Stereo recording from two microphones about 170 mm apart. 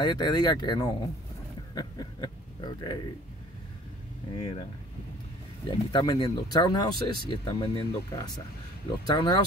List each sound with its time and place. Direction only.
0.0 s speech: 25° left (ahead or behind)
4.4 s speech: 25° left (ahead or behind)
5.7 s speech: 25° left (ahead or behind)